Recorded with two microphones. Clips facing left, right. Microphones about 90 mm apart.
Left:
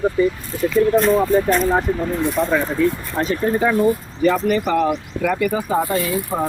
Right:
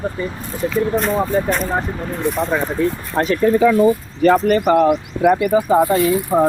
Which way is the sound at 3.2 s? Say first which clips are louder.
Right 4 dB; 75° right (ahead or behind).